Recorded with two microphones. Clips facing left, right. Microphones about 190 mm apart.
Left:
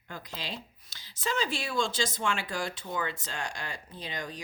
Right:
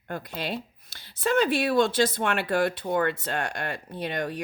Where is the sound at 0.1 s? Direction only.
55° right (ahead or behind).